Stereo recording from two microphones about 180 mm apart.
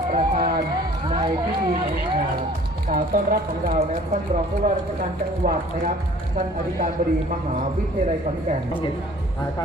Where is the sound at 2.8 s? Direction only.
50° right (ahead or behind).